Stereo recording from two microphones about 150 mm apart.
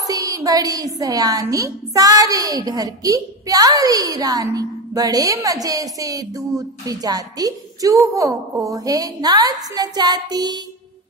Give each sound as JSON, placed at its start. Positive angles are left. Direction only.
{"t": 0.0, "sound": "a woman's voice", "side_deg": -25}